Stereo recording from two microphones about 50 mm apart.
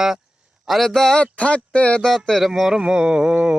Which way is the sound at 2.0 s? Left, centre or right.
Centre.